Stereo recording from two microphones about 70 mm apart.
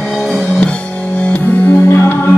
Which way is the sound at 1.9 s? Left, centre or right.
Left.